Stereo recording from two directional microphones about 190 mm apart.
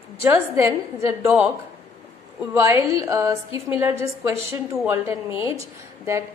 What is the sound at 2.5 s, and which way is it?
A woman's voice, 15° right (ahead or behind).